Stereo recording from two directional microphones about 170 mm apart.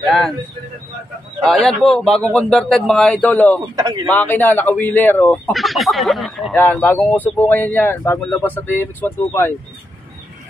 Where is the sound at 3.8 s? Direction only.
20° right (ahead or behind).